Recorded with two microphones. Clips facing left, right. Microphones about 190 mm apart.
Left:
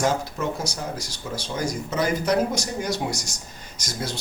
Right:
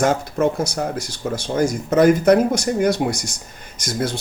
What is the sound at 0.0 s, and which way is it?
A woman's voice, 55° right (ahead or behind).